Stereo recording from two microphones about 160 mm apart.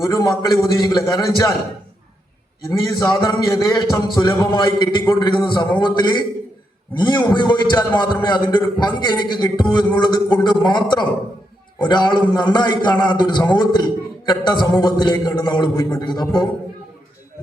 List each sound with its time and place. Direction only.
0.0 s a man's voice: 20° left (ahead or behind)
2.6 s a man's voice: 20° left (ahead or behind)